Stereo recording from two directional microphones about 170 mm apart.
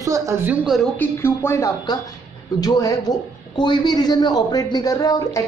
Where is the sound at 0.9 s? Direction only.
10° left (ahead or behind).